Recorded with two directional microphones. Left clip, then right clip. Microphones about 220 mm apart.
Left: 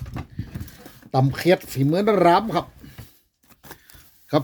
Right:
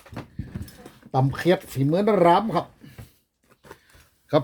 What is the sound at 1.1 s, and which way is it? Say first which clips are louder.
Speech: left 2 dB; 15° left (ahead or behind).